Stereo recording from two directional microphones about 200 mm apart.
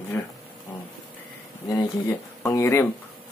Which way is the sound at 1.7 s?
15° left (ahead or behind).